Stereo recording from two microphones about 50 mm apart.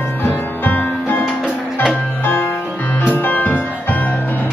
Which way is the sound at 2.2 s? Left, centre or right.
Left.